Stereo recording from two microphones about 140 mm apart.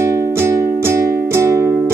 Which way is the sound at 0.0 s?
20° right (ahead or behind).